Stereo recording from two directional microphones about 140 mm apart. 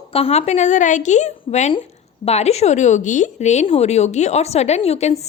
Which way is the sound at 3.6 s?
45° left (ahead or behind).